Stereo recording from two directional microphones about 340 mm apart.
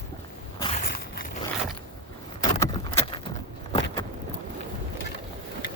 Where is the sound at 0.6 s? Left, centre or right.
Centre.